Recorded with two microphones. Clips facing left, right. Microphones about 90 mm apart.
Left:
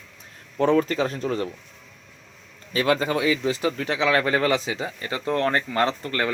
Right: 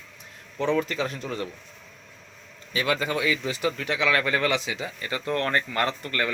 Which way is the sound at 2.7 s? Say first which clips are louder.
Left 4 dB; 35° left (ahead or behind).